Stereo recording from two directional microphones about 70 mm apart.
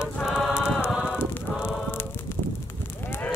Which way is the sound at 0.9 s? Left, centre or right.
Centre.